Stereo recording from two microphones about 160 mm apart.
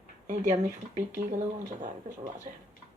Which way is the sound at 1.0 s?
55° right (ahead or behind).